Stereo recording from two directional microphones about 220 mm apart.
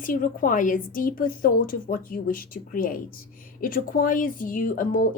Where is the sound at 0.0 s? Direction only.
40° left (ahead or behind).